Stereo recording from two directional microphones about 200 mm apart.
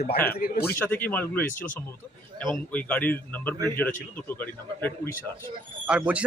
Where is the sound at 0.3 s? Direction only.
50° left (ahead or behind).